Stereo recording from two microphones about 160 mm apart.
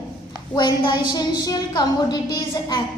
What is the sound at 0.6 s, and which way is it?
A woman's voice, 25° left (ahead or behind).